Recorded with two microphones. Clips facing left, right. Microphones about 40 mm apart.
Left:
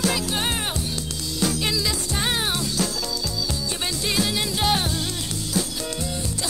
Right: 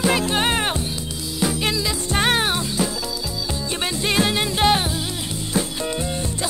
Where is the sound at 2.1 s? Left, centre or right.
Right.